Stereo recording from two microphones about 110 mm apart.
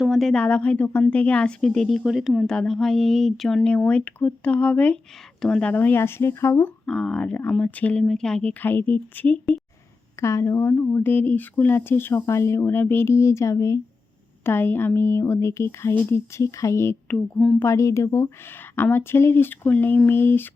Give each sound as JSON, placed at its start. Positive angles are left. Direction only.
{"t": 0.0, "sound": "a woman's voice", "side_deg": 0}
{"t": 6.8, "sound": "a woman's voice", "side_deg": 5}
{"t": 10.2, "sound": "speech", "side_deg": 25}
{"t": 17.1, "sound": "speech", "side_deg": 5}
{"t": 17.6, "sound": "speech", "side_deg": 25}